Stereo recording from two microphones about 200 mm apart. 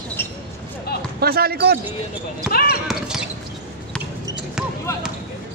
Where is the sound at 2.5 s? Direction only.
45° left (ahead or behind).